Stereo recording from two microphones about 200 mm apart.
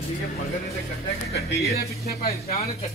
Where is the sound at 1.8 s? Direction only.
50° left (ahead or behind).